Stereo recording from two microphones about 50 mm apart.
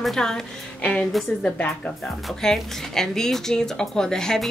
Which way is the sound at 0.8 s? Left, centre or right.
Left.